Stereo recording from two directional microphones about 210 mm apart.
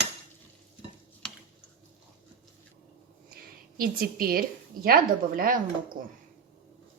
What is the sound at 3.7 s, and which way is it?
Speech, 45° right (ahead or behind).